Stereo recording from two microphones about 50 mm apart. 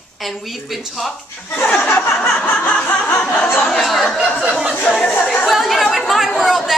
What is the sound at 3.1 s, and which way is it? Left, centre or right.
Speech, left.